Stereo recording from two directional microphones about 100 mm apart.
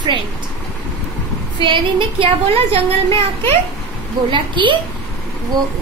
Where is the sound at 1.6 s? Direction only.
55° right (ahead or behind).